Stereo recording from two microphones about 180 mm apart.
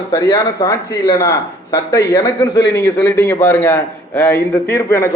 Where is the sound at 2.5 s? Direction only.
70° left (ahead or behind).